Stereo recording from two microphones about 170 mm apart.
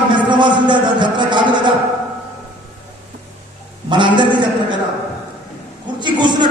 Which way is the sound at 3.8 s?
25° right (ahead or behind).